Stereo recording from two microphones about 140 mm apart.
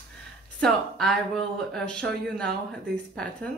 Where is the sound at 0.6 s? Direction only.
5° left (ahead or behind).